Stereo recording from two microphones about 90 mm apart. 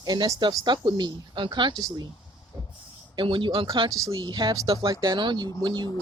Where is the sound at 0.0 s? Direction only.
55° right (ahead or behind).